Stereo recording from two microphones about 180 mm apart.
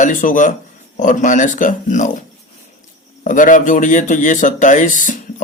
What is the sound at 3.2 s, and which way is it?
A man's voice, 45° left (ahead or behind).